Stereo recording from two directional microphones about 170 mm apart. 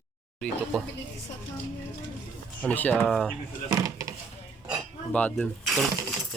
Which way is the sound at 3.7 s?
20° right (ahead or behind).